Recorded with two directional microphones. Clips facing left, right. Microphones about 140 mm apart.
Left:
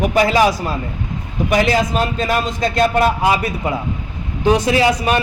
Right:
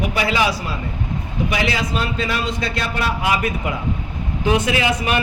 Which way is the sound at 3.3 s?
30° left (ahead or behind).